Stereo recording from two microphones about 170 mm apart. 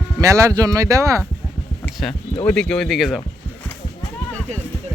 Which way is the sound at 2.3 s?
10° left (ahead or behind).